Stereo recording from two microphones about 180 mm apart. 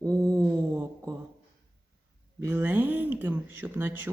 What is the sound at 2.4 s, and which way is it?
Speech, 10° right (ahead or behind).